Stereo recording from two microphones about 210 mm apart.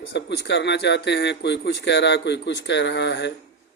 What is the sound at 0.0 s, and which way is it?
Speech, 55° left (ahead or behind).